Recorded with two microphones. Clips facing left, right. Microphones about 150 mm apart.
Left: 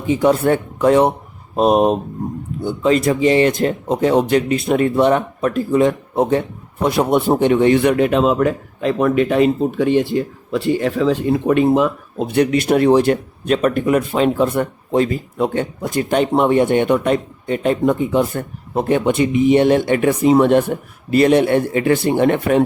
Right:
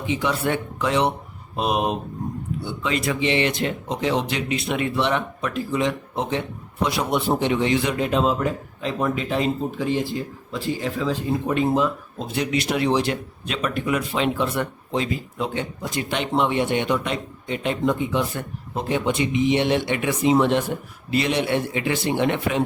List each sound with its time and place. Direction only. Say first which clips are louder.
0.0 s a man's voice: left 9 dB; 45° left (ahead or behind)